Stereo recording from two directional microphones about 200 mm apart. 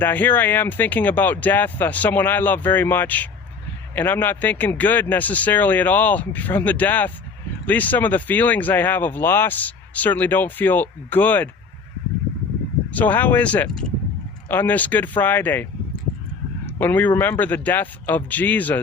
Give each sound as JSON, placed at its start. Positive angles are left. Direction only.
{"t": 0.0, "sound": "speech", "side_deg": 10}
{"t": 12.9, "sound": "speech", "side_deg": 10}
{"t": 16.6, "sound": "speech", "side_deg": 10}